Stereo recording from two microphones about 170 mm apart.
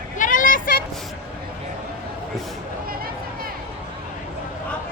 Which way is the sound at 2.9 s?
60° right (ahead or behind).